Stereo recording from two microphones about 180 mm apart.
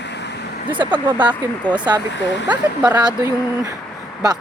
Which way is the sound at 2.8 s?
20° right (ahead or behind).